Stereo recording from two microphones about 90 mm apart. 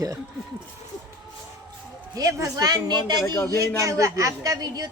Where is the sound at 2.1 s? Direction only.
40° right (ahead or behind).